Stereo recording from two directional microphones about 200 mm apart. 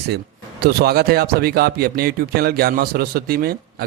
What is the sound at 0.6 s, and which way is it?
Speech, 50° right (ahead or behind).